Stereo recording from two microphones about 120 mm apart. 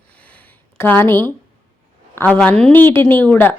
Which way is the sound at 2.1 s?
10° left (ahead or behind).